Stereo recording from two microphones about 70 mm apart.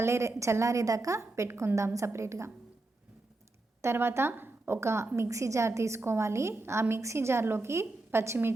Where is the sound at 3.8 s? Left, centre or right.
Right.